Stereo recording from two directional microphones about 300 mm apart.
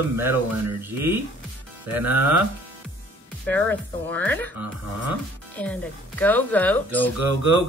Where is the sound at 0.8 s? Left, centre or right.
Centre.